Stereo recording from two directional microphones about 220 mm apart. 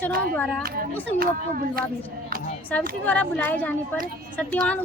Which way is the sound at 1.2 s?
40° right (ahead or behind).